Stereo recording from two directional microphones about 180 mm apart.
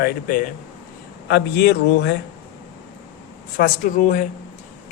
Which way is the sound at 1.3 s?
65° left (ahead or behind).